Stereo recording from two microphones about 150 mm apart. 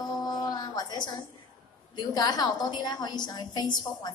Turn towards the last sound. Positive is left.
turn(degrees=30)  # may be behind; listen again after turning